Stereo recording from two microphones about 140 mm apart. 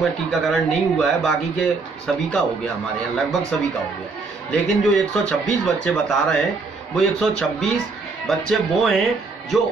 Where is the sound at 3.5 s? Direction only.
5° left (ahead or behind).